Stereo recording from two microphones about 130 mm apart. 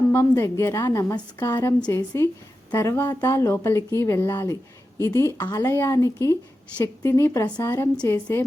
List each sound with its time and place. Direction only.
0.1 s speech: 20° left (ahead or behind)